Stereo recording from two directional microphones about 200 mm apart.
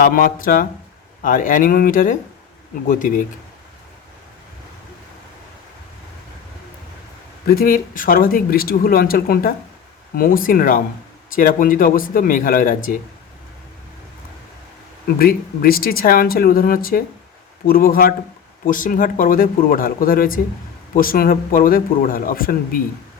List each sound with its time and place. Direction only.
0.0 s speech: 45° left (ahead or behind)
7.4 s speech: 45° left (ahead or behind)
15.0 s speech: 50° left (ahead or behind)